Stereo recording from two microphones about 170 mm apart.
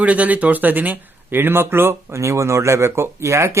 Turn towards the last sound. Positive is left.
turn(degrees=-15)  # may be behind; listen again after turning